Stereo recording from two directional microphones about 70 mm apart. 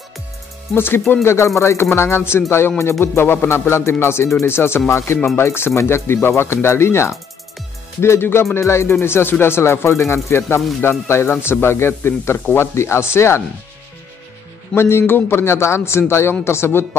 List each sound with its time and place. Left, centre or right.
0.7 s speech: left
14.8 s speech: left